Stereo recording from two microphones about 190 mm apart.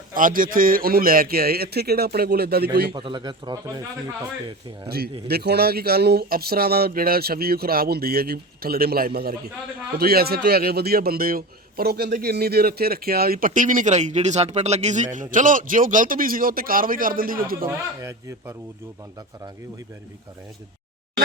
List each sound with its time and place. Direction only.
0.1 s a man's voice: 45° right (ahead or behind)
2.9 s a man's voice: 25° right (ahead or behind)
4.9 s a man's voice: 55° right (ahead or behind)
17.7 s speech: 15° right (ahead or behind)